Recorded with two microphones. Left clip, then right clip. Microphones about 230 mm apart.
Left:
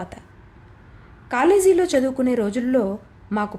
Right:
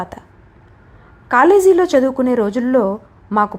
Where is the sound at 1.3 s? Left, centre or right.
Centre.